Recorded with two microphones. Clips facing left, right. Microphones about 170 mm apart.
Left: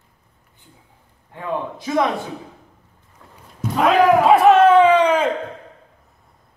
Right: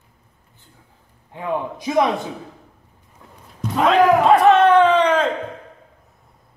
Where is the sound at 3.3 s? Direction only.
5° left (ahead or behind).